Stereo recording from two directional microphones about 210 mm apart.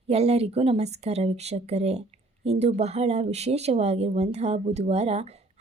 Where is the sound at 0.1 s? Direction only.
30° right (ahead or behind).